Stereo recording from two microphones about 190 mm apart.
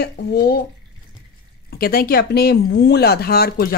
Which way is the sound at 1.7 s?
50° left (ahead or behind).